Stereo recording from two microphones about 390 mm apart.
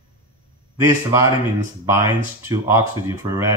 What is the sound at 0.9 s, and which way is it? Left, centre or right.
Speech, centre.